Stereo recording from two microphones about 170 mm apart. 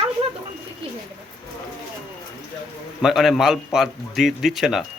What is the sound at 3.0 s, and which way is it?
A man's voice, centre (ahead or behind).